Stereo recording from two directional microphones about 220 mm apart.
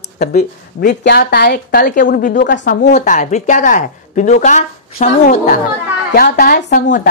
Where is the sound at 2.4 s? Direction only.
50° left (ahead or behind).